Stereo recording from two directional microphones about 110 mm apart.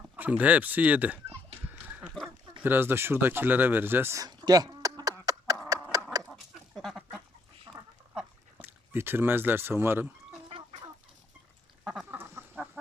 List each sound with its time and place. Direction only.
0.2 s speech: 15° right (ahead or behind)
1.9 s a sound: 15° right (ahead or behind)
2.6 s speech: 20° right (ahead or behind)
4.2 s a sound: 40° right (ahead or behind)
6.2 s chicken: centre (ahead or behind)
7.7 s duck: 25° right (ahead or behind)
8.1 s a sound: 15° right (ahead or behind)
10.5 s chicken: 90° right
12.1 s chicken: 20° right (ahead or behind)